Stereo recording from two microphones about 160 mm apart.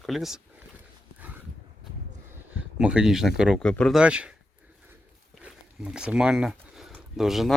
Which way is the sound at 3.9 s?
5° right (ahead or behind).